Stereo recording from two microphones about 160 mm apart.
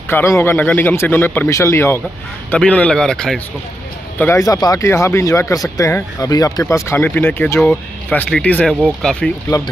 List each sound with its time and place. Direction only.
0.1 s speech: 15° left (ahead or behind)
4.2 s speech: 20° left (ahead or behind)